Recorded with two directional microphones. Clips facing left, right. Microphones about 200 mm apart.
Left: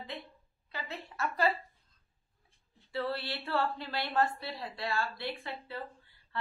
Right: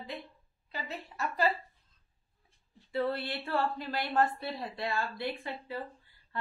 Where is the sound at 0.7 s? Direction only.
15° right (ahead or behind).